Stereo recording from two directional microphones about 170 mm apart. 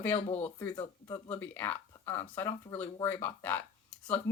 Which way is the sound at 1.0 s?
15° left (ahead or behind).